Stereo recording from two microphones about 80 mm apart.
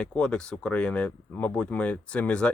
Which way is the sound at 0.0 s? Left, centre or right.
Centre.